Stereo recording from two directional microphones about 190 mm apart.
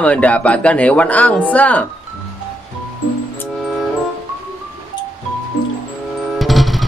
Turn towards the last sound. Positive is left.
turn(degrees=0)  # may be behind; listen again after turning